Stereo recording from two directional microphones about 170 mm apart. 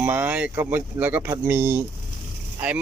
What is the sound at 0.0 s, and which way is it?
Speech, 10° right (ahead or behind).